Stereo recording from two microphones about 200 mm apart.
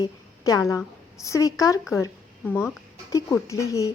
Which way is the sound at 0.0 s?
20° left (ahead or behind).